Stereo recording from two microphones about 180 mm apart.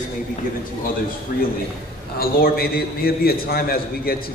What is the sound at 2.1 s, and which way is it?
A man's voice, 55° left (ahead or behind).